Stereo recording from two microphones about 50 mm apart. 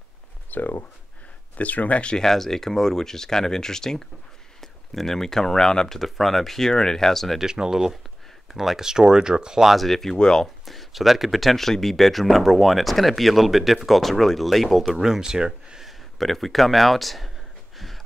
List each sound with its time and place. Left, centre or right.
0.5 s speech: left
1.6 s speech: left
2.1 s speech: centre
7.3 s speech: centre
9.7 s speech: centre
10.6 s speech: centre
16.2 s speech: centre
17.7 s a sound: centre